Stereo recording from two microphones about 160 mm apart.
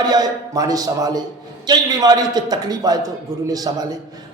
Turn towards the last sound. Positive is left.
turn(degrees=-30)  # may be behind; listen again after turning